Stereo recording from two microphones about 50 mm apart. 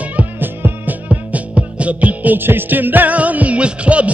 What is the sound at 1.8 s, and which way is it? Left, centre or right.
Music, right.